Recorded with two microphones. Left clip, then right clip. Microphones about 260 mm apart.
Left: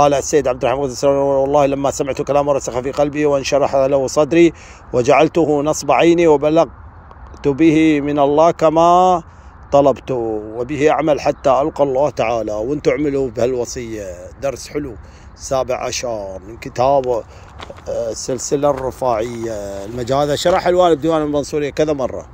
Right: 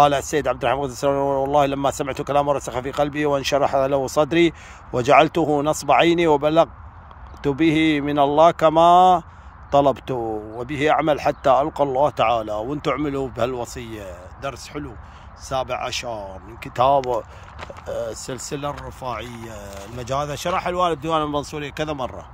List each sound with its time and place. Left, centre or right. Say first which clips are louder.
0.0 s speech: left 4 dB; centre
10.2 s speech: left 5 dB; right
10.6 s speech: left 4 dB; centre